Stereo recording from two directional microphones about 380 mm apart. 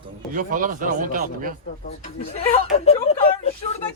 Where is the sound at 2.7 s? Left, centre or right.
Centre.